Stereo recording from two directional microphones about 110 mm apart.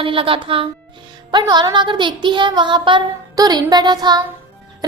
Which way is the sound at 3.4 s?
40° right (ahead or behind).